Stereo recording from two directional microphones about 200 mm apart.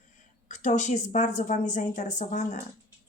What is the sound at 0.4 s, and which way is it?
Speech, 40° left (ahead or behind).